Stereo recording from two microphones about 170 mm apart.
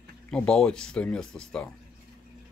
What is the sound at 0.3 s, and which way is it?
Speech, 5° left (ahead or behind).